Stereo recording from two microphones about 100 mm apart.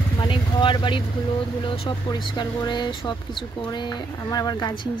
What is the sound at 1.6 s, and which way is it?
Speech, 50° left (ahead or behind).